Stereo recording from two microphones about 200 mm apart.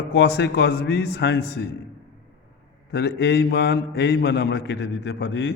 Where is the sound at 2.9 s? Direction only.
55° left (ahead or behind).